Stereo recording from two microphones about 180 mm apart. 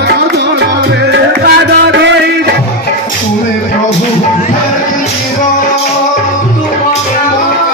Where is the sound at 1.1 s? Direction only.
70° right (ahead or behind).